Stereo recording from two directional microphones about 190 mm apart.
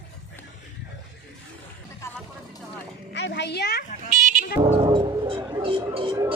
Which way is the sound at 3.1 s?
65° left (ahead or behind).